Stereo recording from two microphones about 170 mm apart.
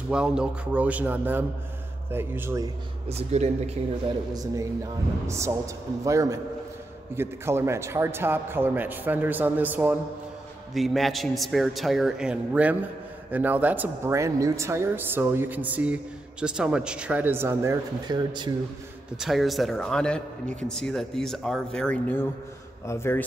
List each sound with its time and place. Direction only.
0.1 s speech: 5° right (ahead or behind)
3.1 s speech: 40° right (ahead or behind)
4.3 s a man's voice: 20° right (ahead or behind)
19.1 s a man's voice: centre (ahead or behind); by 23.2 s 15° left (ahead or behind)